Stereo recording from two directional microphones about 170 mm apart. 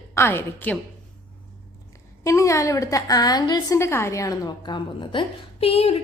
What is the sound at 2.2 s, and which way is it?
A woman's voice, 15° left (ahead or behind).